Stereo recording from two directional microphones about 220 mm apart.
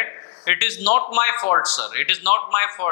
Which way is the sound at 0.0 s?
15° left (ahead or behind).